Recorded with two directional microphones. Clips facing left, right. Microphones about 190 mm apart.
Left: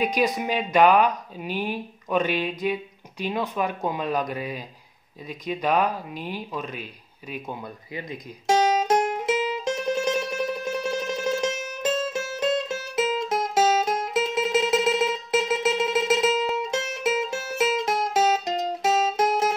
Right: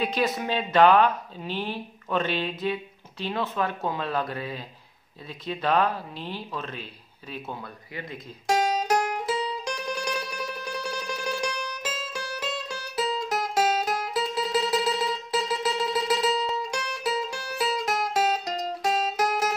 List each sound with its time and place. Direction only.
0.0 s speech: 15° left (ahead or behind)
5.3 s a sound: 15° left (ahead or behind)
12.1 s music: 20° left (ahead or behind)